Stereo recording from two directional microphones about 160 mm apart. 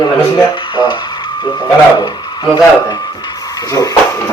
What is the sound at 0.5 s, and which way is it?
Speech, 30° left (ahead or behind).